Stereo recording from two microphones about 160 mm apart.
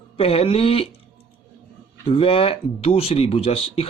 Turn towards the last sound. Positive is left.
turn(degrees=35)  # may be behind; listen again after turning